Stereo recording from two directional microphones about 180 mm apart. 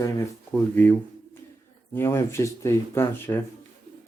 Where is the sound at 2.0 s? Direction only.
15° left (ahead or behind).